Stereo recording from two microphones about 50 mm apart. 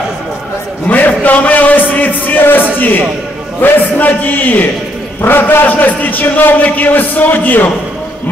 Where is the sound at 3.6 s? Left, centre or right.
Left.